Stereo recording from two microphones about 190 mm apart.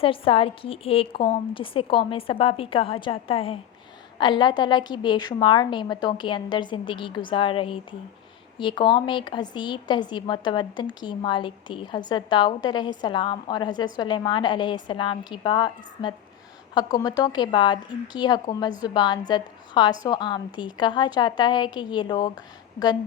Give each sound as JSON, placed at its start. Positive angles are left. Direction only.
{"t": 0.0, "sound": "a woman's voice", "side_deg": 30}